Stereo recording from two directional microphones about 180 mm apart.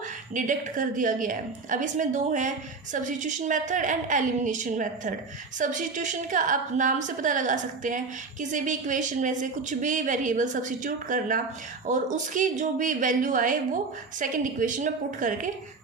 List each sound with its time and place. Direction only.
0.3 s a woman's voice: 45° right (ahead or behind)